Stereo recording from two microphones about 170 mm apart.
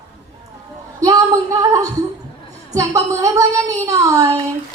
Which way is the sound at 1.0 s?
20° right (ahead or behind).